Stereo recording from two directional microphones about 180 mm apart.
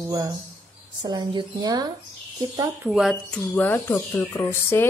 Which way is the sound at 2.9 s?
Centre (ahead or behind).